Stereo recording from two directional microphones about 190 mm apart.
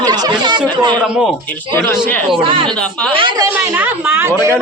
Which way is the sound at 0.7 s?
25° right (ahead or behind).